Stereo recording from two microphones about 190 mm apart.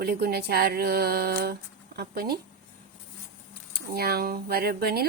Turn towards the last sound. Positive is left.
turn(degrees=-55)  # may be behind; listen again after turning